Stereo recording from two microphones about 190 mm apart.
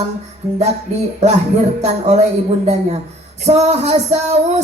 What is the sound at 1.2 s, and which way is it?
Music, 35° right (ahead or behind).